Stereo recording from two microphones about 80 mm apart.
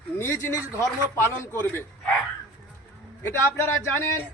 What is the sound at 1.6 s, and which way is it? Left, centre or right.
Speech, left.